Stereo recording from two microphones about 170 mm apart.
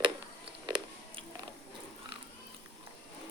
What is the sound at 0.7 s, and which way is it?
Music, 25° right (ahead or behind).